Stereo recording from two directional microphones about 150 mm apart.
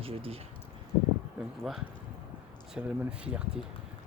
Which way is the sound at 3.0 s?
10° right (ahead or behind).